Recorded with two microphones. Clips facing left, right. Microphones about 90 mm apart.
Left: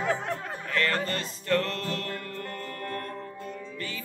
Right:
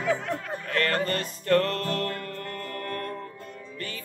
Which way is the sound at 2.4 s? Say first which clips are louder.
Right 1 dB; 25° left (ahead or behind).